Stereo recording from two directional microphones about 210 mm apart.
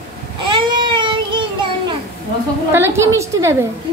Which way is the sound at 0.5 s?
20° right (ahead or behind).